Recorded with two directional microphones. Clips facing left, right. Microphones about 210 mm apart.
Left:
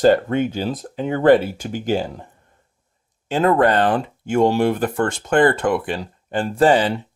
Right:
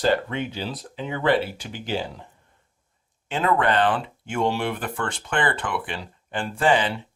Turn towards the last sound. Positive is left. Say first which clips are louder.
# left 6 dB
turn(degrees=40)  # may be behind; listen again after turning